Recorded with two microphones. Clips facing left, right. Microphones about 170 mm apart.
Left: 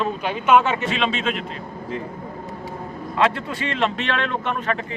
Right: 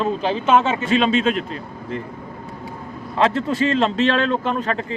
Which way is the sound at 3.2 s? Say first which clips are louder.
Right 3 dB; 35° right (ahead or behind).